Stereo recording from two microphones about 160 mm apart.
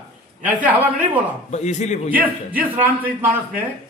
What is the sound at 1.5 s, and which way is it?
Speech, 45° left (ahead or behind).